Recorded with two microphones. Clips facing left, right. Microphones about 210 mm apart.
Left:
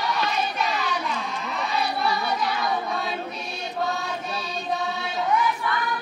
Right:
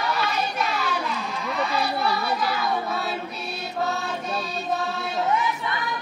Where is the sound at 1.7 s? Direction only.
Centre (ahead or behind).